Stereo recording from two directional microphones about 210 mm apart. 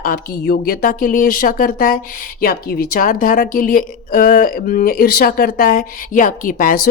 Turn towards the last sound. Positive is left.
turn(degrees=40)  # may be behind; listen again after turning